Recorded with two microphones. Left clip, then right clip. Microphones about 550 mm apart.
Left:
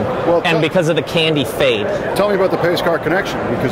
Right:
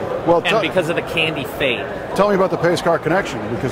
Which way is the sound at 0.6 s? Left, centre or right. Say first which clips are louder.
Left 3 dB; left.